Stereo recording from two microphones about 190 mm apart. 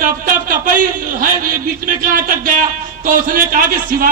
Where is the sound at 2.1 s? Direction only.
45° right (ahead or behind).